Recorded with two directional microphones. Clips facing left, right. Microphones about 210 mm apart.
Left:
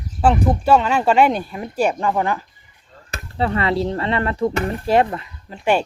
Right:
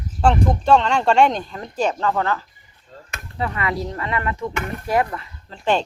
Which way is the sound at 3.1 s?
30° left (ahead or behind).